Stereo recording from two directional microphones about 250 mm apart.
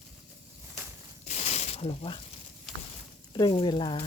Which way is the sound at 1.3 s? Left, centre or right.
Left.